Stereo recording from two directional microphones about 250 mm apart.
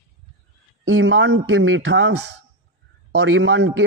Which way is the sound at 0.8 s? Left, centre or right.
Right.